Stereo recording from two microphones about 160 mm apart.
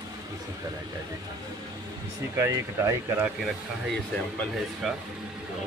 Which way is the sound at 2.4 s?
20° right (ahead or behind).